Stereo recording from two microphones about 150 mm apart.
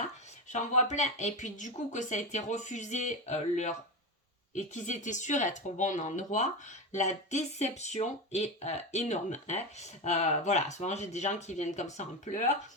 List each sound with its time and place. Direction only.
0.5 s speech: 55° left (ahead or behind)